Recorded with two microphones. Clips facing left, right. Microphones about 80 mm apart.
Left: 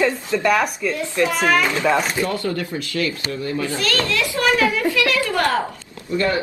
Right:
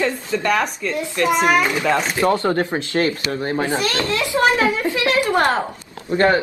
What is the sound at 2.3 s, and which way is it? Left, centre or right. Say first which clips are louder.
Speech: right 5 dB; right.